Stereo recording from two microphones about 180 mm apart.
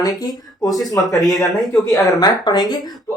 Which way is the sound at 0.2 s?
20° left (ahead or behind).